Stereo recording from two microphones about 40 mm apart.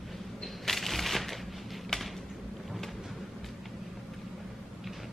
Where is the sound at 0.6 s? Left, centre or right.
Centre.